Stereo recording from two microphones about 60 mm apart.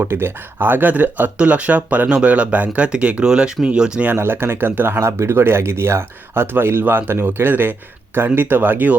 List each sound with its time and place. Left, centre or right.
0.0 s speech: right; by 4.0 s centre
4.2 s speech: right
4.9 s speech: right